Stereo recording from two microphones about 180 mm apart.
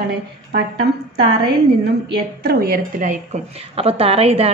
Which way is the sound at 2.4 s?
60° right (ahead or behind).